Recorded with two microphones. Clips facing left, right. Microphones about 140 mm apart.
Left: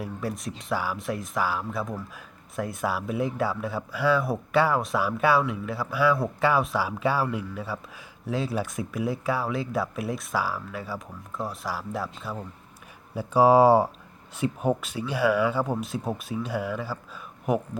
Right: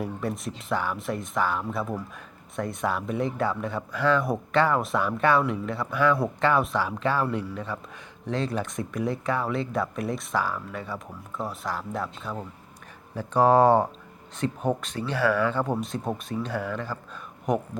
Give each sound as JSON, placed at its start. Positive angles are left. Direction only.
{"t": 0.0, "sound": "speech", "side_deg": 0}